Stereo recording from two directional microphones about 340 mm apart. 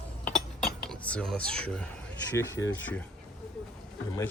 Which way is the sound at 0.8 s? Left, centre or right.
Centre.